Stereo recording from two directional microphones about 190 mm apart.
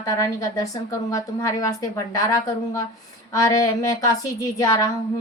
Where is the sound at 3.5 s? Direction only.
15° left (ahead or behind).